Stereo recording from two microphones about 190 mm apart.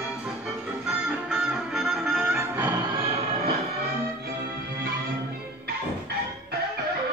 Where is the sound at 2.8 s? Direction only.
30° right (ahead or behind).